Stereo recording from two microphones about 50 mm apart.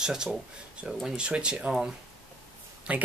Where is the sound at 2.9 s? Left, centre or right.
Right.